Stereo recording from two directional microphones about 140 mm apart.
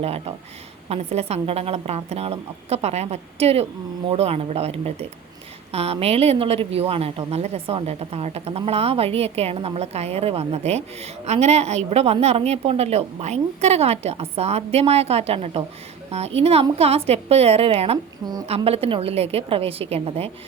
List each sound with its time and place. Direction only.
0.0 s a woman's voice: 45° right (ahead or behind)